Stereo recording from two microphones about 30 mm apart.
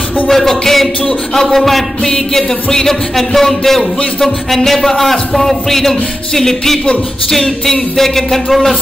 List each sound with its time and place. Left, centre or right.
0.3 s music: centre
2.3 s music: centre